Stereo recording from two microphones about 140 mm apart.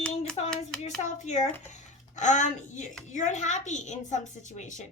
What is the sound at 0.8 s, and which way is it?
A child's voice, 55° left (ahead or behind).